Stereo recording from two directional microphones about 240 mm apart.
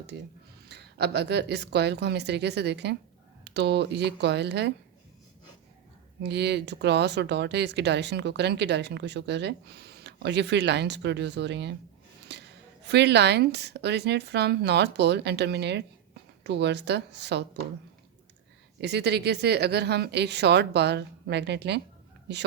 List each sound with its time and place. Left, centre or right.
0.7 s speech: right
6.2 s speech: right
18.8 s speech: right